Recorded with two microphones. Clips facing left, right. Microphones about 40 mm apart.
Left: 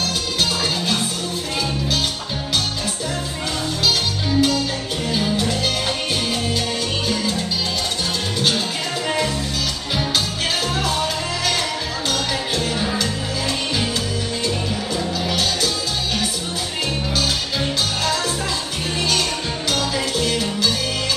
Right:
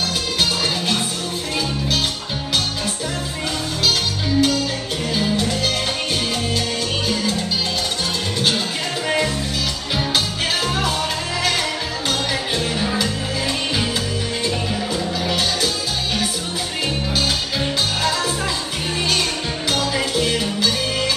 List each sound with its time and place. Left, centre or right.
4.4 s music: centre
12.8 s music: centre
15.2 s music: centre
17.2 s music: centre
19.7 s music: centre